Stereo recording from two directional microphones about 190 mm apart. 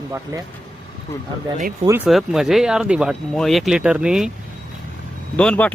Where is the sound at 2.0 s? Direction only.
Centre (ahead or behind).